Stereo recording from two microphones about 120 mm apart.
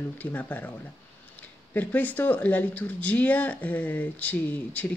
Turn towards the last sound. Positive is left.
turn(degrees=10)  # may be behind; listen again after turning